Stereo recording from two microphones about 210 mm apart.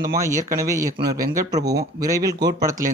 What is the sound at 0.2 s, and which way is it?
Speech, 15° right (ahead or behind).